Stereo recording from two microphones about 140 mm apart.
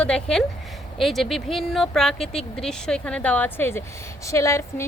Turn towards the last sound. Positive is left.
turn(degrees=20)  # may be behind; listen again after turning